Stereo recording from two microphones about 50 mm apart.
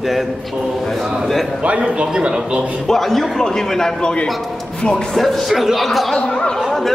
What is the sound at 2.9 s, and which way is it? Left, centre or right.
A man's voice, centre.